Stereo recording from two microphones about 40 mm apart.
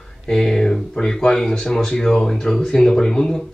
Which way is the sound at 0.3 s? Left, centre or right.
Centre.